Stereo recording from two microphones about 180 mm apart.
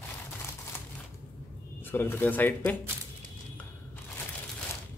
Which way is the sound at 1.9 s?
10° left (ahead or behind).